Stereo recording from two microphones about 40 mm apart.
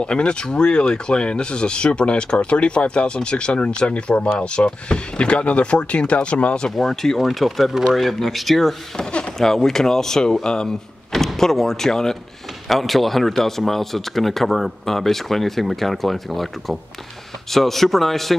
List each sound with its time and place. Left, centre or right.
0.0 s speech: left
6.8 s speech: centre
7.2 s speech: centre
8.9 s a sound: left
9.4 s speech: centre
12.6 s speech: centre